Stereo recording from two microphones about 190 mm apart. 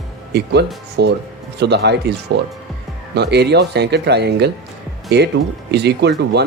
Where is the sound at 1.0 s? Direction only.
60° right (ahead or behind).